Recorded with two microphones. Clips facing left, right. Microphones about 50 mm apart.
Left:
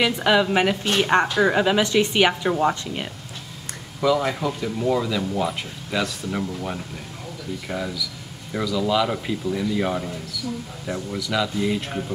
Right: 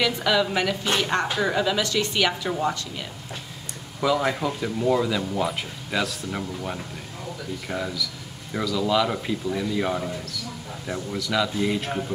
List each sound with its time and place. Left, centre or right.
0.0 s a woman's voice: left
4.0 s speech: centre